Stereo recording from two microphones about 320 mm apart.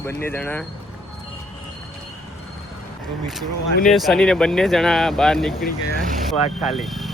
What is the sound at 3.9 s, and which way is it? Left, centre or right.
Speech, centre.